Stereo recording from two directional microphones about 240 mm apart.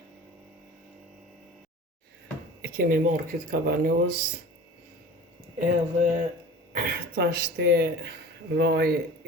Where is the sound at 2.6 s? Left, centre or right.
Right.